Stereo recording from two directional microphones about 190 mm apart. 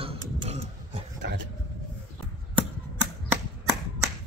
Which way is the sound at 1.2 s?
65° right (ahead or behind).